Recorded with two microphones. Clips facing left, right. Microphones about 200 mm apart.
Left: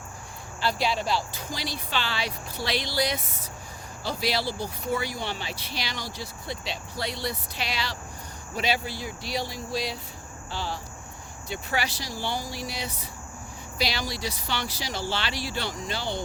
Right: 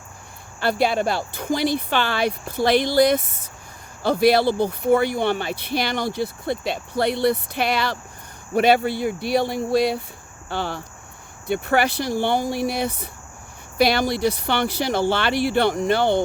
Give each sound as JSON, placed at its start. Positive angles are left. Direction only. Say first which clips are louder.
{"t": 0.6, "sound": "speech", "louder": "right 7 dB", "side_deg": -55}